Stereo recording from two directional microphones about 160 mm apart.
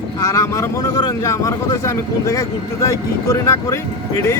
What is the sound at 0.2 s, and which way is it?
Speech, 20° left (ahead or behind).